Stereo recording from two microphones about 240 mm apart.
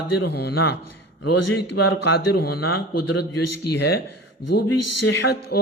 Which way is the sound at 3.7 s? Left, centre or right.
Left.